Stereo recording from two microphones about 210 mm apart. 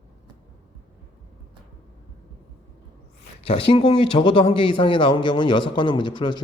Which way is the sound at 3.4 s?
25° left (ahead or behind).